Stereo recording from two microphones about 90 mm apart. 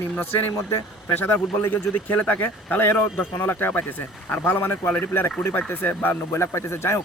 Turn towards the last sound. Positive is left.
turn(degrees=30)  # may be behind; listen again after turning